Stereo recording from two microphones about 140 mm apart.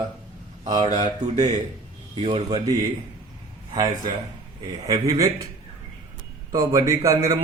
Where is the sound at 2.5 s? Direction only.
25° right (ahead or behind).